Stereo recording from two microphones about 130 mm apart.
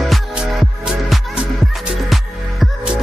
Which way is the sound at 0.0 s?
Centre (ahead or behind).